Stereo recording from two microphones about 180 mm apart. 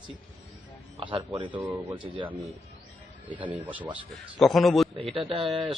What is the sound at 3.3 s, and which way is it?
A man's voice, 10° right (ahead or behind).